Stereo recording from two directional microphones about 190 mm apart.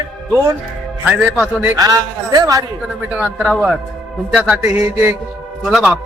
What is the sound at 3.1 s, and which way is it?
Speech, 5° right (ahead or behind).